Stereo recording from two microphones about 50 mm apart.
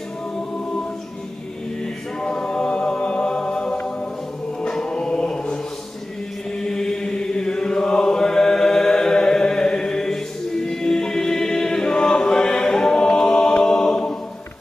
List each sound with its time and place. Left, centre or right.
2.2 s a capella: centre
4.6 s music: centre
6.6 s mantra: centre